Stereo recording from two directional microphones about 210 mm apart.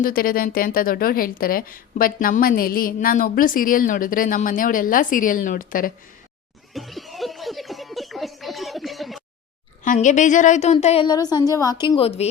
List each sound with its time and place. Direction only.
0.0 s a woman's voice: 45° left (ahead or behind)
6.7 s snicker: centre (ahead or behind)
9.8 s a woman's voice: 35° left (ahead or behind)